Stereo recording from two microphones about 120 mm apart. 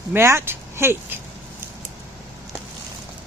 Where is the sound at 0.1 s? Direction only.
20° right (ahead or behind).